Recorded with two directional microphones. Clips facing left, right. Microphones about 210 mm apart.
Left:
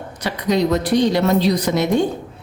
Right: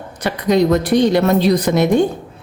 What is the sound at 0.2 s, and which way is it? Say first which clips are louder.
A woman's voice: right 4 dB; 50° right (ahead or behind).